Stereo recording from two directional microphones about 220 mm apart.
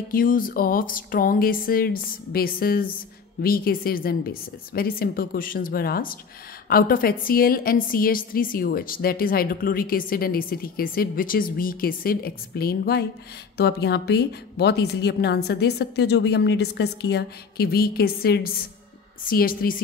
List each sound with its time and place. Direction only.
0.1 s a woman's voice: 40° left (ahead or behind)